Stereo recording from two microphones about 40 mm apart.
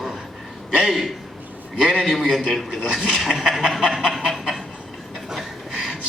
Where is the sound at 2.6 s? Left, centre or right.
Centre.